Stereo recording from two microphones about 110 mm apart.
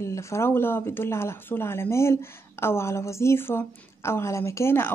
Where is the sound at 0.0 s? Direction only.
25° left (ahead or behind).